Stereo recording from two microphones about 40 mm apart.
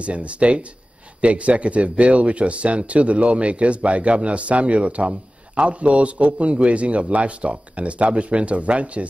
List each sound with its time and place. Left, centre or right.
0.0 s speech: right